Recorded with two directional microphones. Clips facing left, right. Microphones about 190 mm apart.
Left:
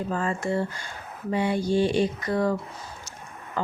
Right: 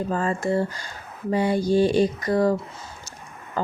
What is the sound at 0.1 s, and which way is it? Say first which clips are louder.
Speech: right 3 dB; 40° right (ahead or behind).